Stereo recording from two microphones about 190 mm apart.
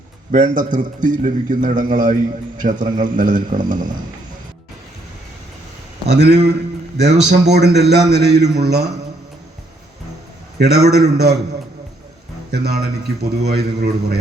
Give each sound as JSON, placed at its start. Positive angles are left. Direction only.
{"t": 0.3, "sound": "a man's voice", "side_deg": -40}
{"t": 6.1, "sound": "a man's voice", "side_deg": -60}
{"t": 10.6, "sound": "a man's voice", "side_deg": -60}
{"t": 12.5, "sound": "a man's voice", "side_deg": -60}